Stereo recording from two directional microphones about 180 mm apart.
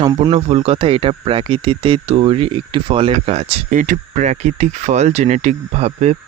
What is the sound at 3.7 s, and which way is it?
Speech, 45° right (ahead or behind).